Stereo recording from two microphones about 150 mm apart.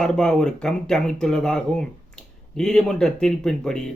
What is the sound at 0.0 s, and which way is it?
Speech, 5° left (ahead or behind).